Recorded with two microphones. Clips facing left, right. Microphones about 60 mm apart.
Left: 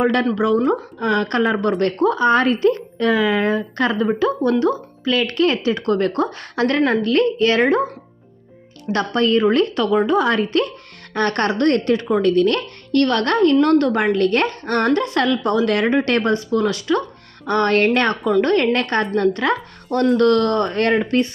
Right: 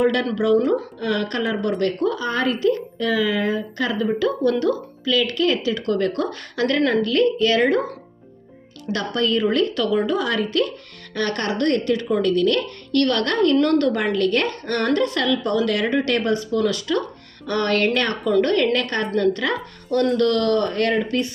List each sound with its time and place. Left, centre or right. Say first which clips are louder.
0.0 s a woman's voice: left 2 dB; left
4.6 s speech: left 2 dB; left
5.1 s speech: left 2 dB; left
8.9 s speech: left 4 dB; left
18.2 s a woman's voice: left 2 dB; left
18.8 s speech: left 3 dB; left